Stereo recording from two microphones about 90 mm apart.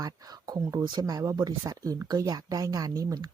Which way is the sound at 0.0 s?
45° right (ahead or behind).